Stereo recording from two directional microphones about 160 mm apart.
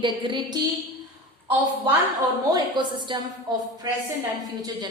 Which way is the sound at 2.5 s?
25° right (ahead or behind).